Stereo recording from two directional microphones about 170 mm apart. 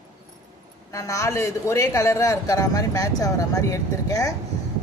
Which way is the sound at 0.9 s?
20° left (ahead or behind).